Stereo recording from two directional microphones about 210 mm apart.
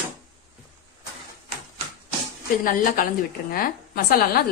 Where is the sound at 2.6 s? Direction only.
40° left (ahead or behind).